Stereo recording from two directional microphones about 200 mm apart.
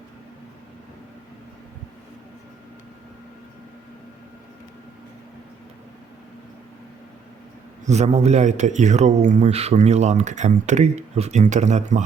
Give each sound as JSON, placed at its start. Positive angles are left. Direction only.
{"t": 7.9, "sound": "a man's voice", "side_deg": -35}